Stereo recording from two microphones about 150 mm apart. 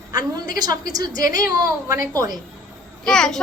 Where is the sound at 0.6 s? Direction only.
25° right (ahead or behind).